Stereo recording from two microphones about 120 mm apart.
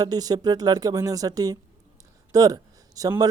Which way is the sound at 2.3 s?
30° right (ahead or behind).